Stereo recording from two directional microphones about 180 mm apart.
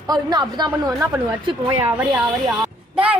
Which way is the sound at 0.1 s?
25° right (ahead or behind).